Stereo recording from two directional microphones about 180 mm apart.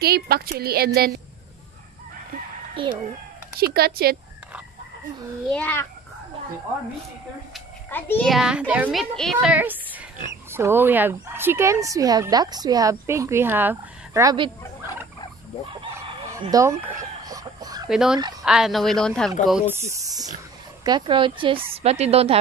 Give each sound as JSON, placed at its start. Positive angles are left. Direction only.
{"t": 0.0, "sound": "a woman's voice", "side_deg": -60}
{"t": 2.7, "sound": "speech", "side_deg": -30}
{"t": 3.5, "sound": "a woman's voice", "side_deg": -60}
{"t": 5.5, "sound": "a child's voice", "side_deg": 10}
{"t": 7.9, "sound": "a child's voice", "side_deg": 10}
{"t": 8.3, "sound": "a woman's voice", "side_deg": -5}
{"t": 16.4, "sound": "chicken", "side_deg": -15}
{"t": 17.8, "sound": "speech", "side_deg": -5}
{"t": 19.7, "sound": "a woman's voice", "side_deg": -15}